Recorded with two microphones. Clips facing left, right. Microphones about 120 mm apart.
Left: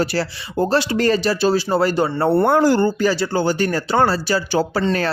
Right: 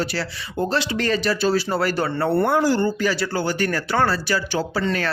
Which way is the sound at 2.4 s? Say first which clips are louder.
Left 5 dB; 55° left (ahead or behind).